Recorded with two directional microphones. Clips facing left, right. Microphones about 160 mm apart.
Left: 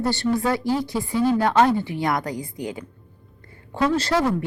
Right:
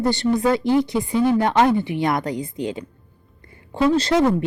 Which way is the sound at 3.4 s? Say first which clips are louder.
Right 3 dB; 20° right (ahead or behind).